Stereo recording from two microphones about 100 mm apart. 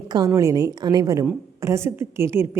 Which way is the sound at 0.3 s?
35° right (ahead or behind).